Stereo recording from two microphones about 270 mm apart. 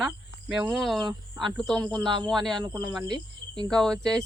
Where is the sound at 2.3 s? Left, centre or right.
Centre.